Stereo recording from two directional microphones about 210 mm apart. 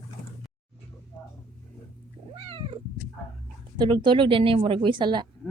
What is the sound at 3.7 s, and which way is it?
Speech, 20° right (ahead or behind).